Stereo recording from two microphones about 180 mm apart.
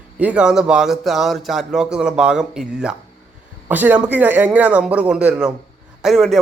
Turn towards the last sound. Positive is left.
turn(degrees=0)  # may be behind; listen again after turning